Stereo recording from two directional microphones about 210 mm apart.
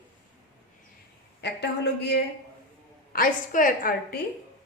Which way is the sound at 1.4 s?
50° left (ahead or behind).